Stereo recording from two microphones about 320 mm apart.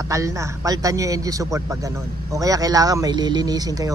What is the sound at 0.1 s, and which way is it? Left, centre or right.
Speech, centre.